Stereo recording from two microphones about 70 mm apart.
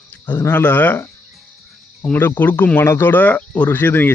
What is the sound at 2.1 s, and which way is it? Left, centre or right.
Speech, left.